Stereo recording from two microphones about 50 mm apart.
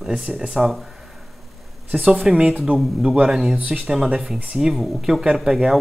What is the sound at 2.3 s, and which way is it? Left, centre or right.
A man's voice, centre.